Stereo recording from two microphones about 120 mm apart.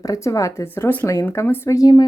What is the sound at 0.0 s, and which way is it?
A woman's voice, 30° left (ahead or behind).